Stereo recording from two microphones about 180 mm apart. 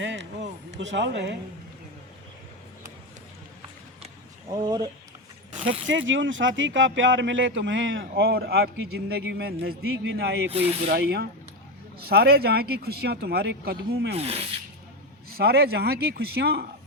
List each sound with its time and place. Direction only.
0.0 s run: 80° right
0.8 s speech: 80° right
4.5 s speech: 20° right (ahead or behind)
5.9 s speech: 90° right; by 14.2 s 60° right (ahead or behind)
14.2 s speech: 35° right (ahead or behind)
15.3 s speech: 60° right (ahead or behind)